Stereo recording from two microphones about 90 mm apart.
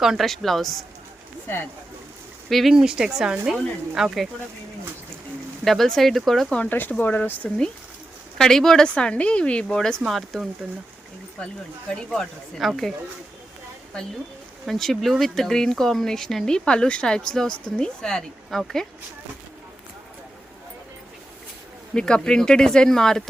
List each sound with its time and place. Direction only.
0.0 s speech: centre (ahead or behind)
2.5 s speech: centre (ahead or behind)
5.6 s speech: centre (ahead or behind)
6.6 s speech: 20° left (ahead or behind)
8.4 s speech: 5° left (ahead or behind)
11.4 s speech: 15° left (ahead or behind)
14.7 s speech: 5° left (ahead or behind)
21.9 s speech: 10° left (ahead or behind)